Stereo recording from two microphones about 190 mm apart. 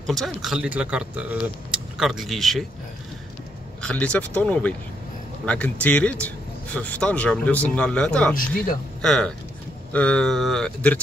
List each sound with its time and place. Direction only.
0.0 s speech: centre (ahead or behind)
3.8 s speech: 5° left (ahead or behind)
8.4 s speech: 45° left (ahead or behind)
9.0 s speech: 5° left (ahead or behind)